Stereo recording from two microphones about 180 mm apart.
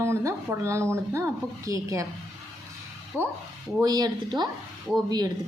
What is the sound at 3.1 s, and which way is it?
Speech, 10° left (ahead or behind).